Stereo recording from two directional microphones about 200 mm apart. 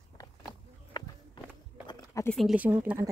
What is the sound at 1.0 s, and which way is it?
Walk, 20° left (ahead or behind).